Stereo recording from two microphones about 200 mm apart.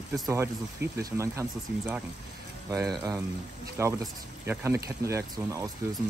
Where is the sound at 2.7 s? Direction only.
15° right (ahead or behind).